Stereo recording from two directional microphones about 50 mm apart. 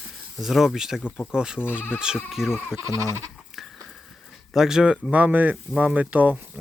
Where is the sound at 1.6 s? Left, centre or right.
Left.